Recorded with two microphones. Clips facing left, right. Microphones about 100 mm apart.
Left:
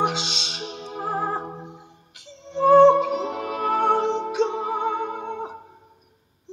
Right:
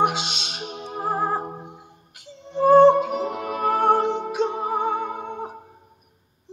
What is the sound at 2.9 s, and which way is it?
Music, 50° right (ahead or behind).